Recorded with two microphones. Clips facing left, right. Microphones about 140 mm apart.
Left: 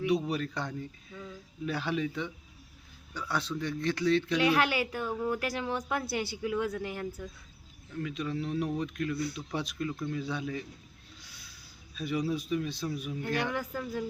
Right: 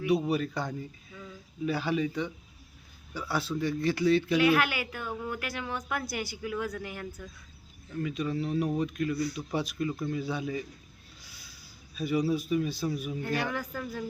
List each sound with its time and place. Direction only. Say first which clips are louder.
0.1 s speech: right 6 dB; 5° right (ahead or behind)
4.4 s speech: right 2 dB; 30° left (ahead or behind)
7.9 s speech: right 3 dB; centre (ahead or behind)
11.2 s a sound: even; centre (ahead or behind)
11.9 s speech: right 4 dB; 5° right (ahead or behind)
13.2 s speech: left 1 dB; 20° left (ahead or behind)